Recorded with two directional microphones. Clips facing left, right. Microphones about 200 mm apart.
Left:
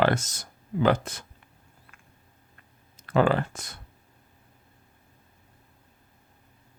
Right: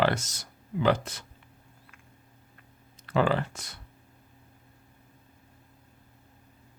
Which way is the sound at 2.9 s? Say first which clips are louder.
Left 3 dB; 50° left (ahead or behind).